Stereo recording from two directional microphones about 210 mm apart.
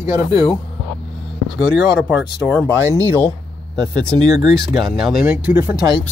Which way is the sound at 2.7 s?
15° right (ahead or behind).